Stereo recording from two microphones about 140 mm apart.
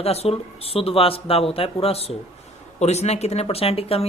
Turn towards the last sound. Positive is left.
turn(degrees=45)  # may be behind; listen again after turning